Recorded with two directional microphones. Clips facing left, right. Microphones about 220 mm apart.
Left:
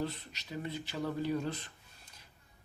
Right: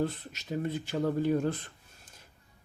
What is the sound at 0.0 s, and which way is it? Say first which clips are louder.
Speech: right 6 dB; 50° right (ahead or behind).